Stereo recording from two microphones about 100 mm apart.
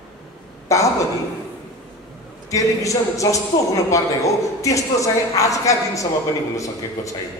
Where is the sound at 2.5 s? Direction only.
35° left (ahead or behind).